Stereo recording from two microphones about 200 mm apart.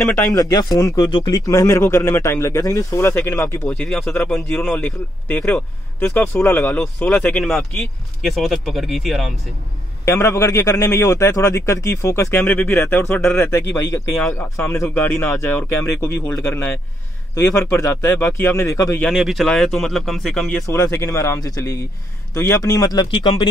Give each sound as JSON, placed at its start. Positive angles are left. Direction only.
{"t": 0.3, "sound": "a man's voice", "side_deg": 20}
{"t": 10.0, "sound": "a man's voice", "side_deg": 15}
{"t": 19.0, "sound": "speech", "side_deg": 0}
{"t": 20.6, "sound": "a man's voice", "side_deg": 15}